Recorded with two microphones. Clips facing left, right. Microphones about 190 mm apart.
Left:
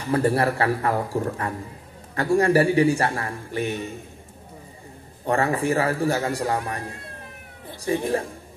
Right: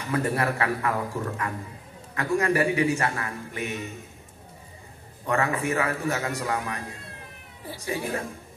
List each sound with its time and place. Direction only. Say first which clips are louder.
0.0 s a man's voice: left 5 dB; 30° left (ahead or behind)
5.2 s a man's voice: left 4 dB; 30° left (ahead or behind)